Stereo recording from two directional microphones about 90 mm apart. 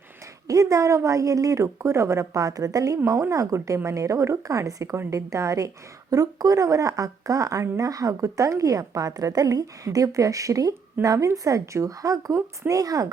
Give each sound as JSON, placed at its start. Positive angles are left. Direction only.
{"t": 0.4, "sound": "a woman's voice", "side_deg": -35}